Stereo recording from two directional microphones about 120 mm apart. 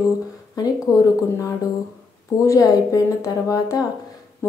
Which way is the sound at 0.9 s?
30° left (ahead or behind).